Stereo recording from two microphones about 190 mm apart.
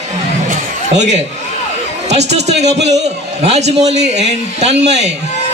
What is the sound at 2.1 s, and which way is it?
A man's voice, 35° right (ahead or behind).